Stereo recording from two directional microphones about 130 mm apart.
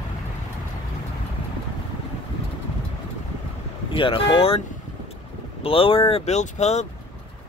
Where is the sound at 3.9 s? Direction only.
40° left (ahead or behind).